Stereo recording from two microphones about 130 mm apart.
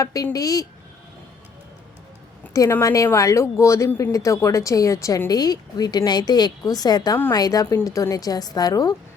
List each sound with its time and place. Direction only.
0.0 s a woman's voice: 25° left (ahead or behind)
2.5 s a woman's voice: 20° left (ahead or behind)